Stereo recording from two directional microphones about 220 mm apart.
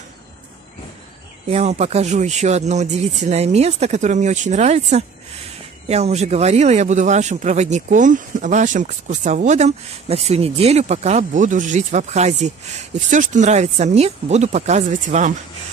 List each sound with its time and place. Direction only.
1.5 s speech: 30° right (ahead or behind)